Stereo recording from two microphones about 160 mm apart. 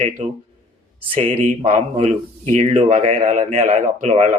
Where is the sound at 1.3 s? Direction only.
40° right (ahead or behind).